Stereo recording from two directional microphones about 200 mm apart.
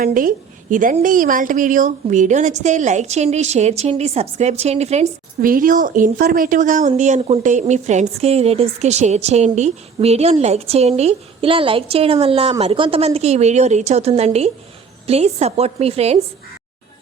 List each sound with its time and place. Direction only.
0.0 s a woman's voice: 45° right (ahead or behind)